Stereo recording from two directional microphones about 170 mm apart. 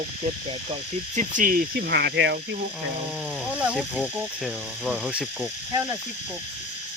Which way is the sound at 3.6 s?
5° right (ahead or behind).